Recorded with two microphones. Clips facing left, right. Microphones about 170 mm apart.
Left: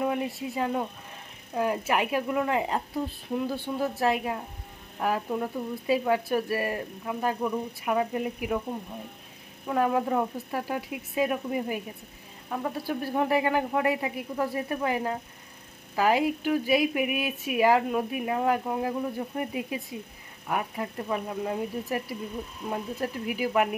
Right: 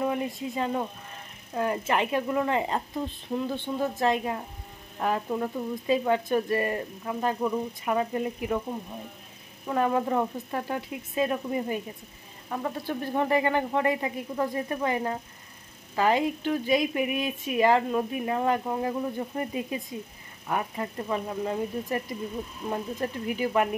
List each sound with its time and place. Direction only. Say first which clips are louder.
0.0 s speech: even; 5° left (ahead or behind)
9.7 s speech: even; 5° left (ahead or behind)